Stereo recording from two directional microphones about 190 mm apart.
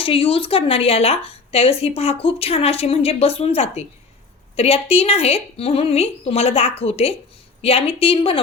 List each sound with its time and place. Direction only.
0.0 s a woman's voice: 30° left (ahead or behind)